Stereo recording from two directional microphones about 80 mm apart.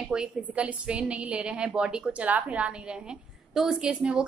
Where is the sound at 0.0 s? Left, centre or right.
Centre.